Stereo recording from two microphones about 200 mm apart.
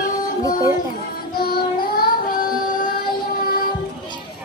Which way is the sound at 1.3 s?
50° left (ahead or behind).